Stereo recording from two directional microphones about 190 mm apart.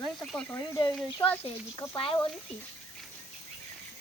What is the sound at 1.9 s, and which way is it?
Speech, 30° left (ahead or behind).